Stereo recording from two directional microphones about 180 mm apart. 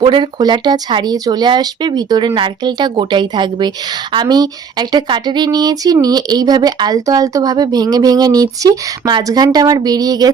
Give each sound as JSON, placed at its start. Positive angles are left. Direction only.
{"t": 0.0, "sound": "speech", "side_deg": -25}